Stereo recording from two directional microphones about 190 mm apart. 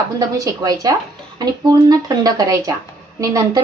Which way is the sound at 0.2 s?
20° right (ahead or behind).